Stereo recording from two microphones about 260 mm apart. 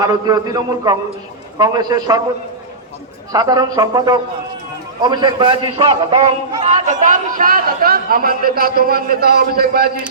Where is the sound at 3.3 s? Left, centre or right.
Centre.